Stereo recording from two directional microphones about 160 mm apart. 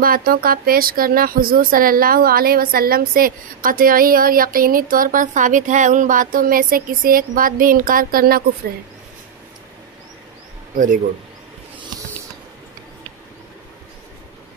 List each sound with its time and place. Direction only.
0.0 s speech: 65° right (ahead or behind)